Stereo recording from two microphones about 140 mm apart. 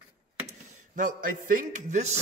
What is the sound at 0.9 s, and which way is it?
A man's voice, 70° right (ahead or behind).